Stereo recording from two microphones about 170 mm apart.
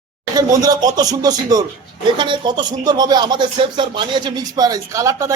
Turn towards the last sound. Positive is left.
turn(degrees=-20)  # may be behind; listen again after turning